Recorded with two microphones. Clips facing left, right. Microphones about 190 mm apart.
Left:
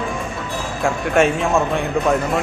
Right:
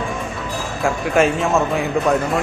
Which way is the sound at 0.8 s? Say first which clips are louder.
Even; centre (ahead or behind).